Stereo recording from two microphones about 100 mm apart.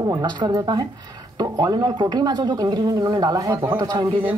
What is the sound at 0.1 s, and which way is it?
A man's voice, 40° right (ahead or behind).